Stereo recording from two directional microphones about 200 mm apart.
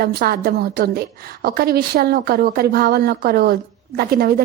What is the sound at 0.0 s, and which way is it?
A woman's voice, 50° right (ahead or behind).